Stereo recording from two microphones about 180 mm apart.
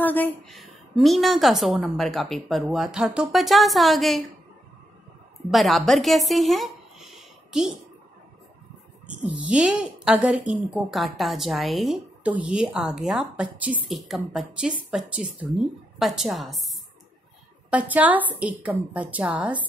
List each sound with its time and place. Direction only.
0.0 s a woman's voice: 10° left (ahead or behind)
5.5 s speech: centre (ahead or behind)
9.3 s a woman's voice: 5° right (ahead or behind)
17.6 s a woman's voice: 5° right (ahead or behind)